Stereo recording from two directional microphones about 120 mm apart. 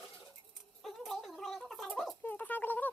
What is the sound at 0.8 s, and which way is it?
Gargling, centre (ahead or behind).